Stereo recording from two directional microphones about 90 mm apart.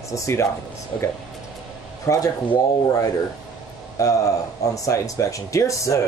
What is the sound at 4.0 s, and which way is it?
Speech, 40° left (ahead or behind).